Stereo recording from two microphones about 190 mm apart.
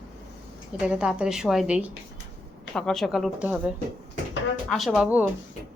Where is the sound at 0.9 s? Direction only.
5° right (ahead or behind).